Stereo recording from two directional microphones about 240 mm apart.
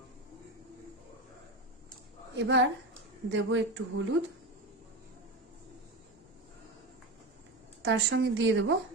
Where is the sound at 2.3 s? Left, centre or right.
Right.